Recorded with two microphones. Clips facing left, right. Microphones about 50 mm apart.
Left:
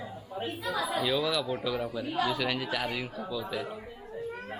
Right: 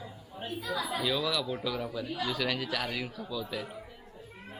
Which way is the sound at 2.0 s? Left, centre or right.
Left.